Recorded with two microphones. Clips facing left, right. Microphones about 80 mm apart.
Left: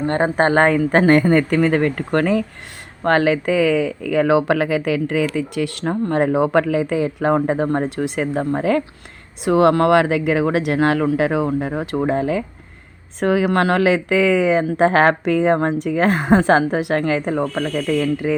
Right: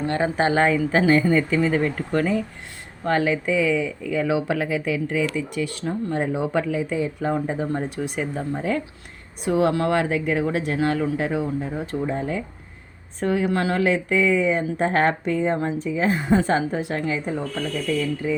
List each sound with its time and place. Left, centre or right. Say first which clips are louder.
0.0 s speech: left 4 dB; left